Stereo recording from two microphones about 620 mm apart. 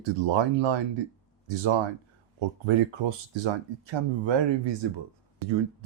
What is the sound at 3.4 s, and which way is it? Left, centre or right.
Speech, right.